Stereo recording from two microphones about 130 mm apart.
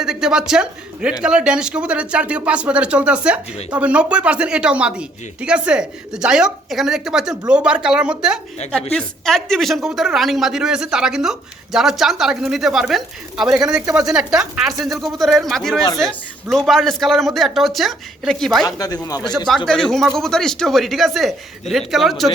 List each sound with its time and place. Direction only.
0.0 s speech: 5° right (ahead or behind)
8.9 s speech: 5° left (ahead or behind)
18.6 s speech: 30° left (ahead or behind)
19.5 s speech: 5° left (ahead or behind)